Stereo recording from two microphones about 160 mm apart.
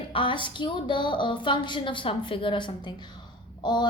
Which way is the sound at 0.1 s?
30° left (ahead or behind).